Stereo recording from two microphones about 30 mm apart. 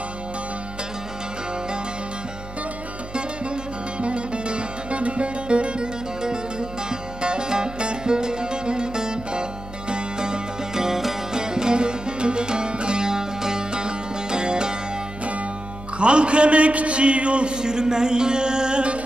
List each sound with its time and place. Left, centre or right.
4.0 s music: right
6.9 s music: right; by 11.1 s centre
11.3 s music: right
16.0 s a man's voice: right
17.6 s music: right